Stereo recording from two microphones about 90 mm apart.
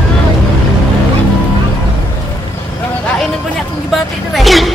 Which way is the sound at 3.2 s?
Centre (ahead or behind).